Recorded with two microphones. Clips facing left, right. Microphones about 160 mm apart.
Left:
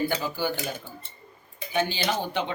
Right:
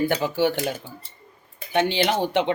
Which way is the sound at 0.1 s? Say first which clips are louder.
Right 6 dB; 75° right (ahead or behind).